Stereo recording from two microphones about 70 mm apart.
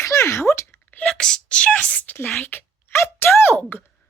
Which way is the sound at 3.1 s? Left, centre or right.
Left.